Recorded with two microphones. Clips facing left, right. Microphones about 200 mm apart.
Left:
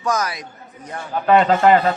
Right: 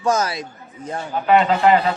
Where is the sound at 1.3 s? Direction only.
45° left (ahead or behind).